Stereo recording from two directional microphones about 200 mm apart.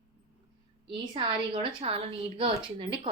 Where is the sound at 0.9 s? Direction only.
25° right (ahead or behind).